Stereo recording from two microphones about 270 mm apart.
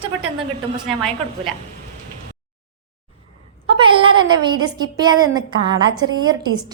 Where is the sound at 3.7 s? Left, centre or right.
Centre.